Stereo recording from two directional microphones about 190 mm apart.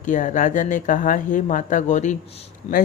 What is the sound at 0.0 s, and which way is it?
Speech, 45° left (ahead or behind).